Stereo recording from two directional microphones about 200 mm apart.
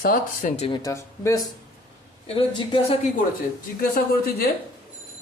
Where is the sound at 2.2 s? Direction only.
25° left (ahead or behind).